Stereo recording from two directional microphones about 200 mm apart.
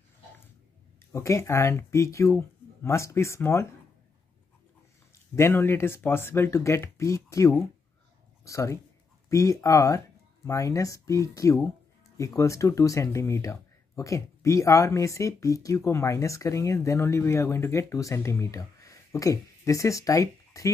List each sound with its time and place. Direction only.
1.1 s speech: 15° left (ahead or behind)
5.3 s speech: 15° left (ahead or behind)